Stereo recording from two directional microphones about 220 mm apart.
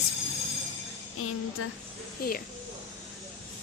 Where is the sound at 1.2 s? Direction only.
75° left (ahead or behind).